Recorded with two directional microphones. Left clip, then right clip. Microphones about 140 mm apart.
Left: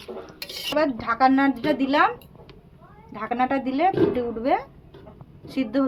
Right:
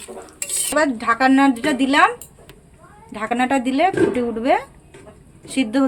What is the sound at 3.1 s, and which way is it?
A woman's voice, 90° right.